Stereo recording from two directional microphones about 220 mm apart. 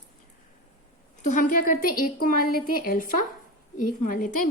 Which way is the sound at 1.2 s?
35° left (ahead or behind).